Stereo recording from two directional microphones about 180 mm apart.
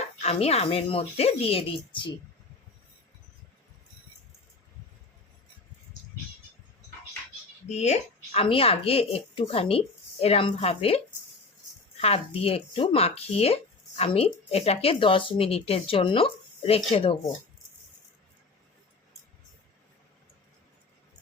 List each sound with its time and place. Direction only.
0.2 s speech: 35° left (ahead or behind)
7.7 s speech: 40° left (ahead or behind)